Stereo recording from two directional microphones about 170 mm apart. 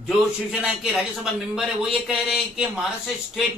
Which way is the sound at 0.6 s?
Centre (ahead or behind).